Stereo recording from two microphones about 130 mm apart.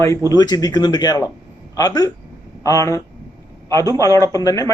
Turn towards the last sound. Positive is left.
turn(degrees=25)  # may be behind; listen again after turning